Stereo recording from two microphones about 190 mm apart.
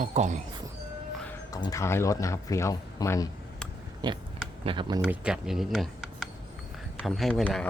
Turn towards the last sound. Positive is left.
turn(degrees=5)  # may be behind; listen again after turning